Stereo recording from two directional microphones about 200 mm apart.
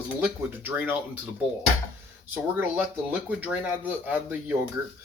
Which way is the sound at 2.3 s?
10° right (ahead or behind).